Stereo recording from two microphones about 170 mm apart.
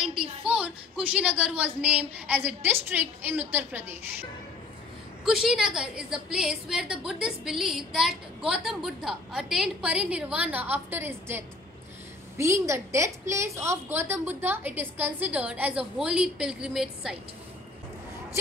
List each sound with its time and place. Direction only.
0.0 s a sound: 5° right (ahead or behind)
0.5 s a woman's voice: 5° right (ahead or behind)
5.2 s a woman's voice: centre (ahead or behind)